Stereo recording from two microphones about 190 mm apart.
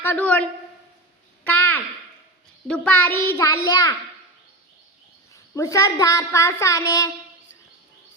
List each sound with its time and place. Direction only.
0.0 s a woman's voice: 10° left (ahead or behind)
1.5 s a sound: 10° left (ahead or behind)
2.6 s a woman's voice: 5° left (ahead or behind)
5.3 s a woman's voice: 15° left (ahead or behind)